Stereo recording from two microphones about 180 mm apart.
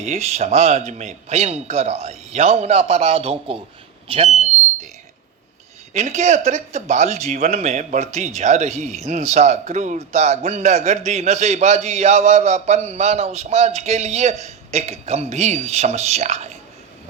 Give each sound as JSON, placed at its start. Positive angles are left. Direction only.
{"t": 0.0, "sound": "a man's voice", "side_deg": -40}
{"t": 5.9, "sound": "a man's voice", "side_deg": -40}
{"t": 8.7, "sound": "speech", "side_deg": 0}
{"t": 9.0, "sound": "a man's voice", "side_deg": -40}